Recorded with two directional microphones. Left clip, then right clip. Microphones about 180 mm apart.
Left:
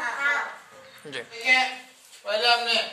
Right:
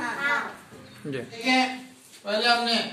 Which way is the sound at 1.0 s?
25° left (ahead or behind).